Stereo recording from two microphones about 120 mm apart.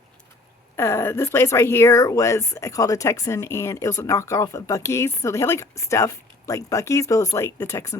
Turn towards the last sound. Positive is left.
turn(degrees=25)  # may be behind; listen again after turning